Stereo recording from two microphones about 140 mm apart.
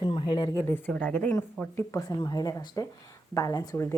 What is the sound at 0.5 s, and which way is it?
Speech, 15° left (ahead or behind).